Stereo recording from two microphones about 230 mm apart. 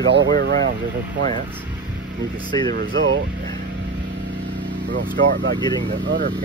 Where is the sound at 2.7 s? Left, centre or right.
Right.